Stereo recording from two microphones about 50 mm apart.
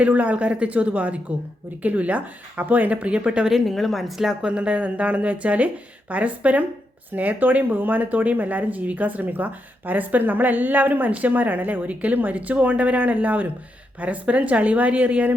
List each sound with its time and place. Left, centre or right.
0.0 s speech: right
3.5 s speech: centre
4.4 s speech: right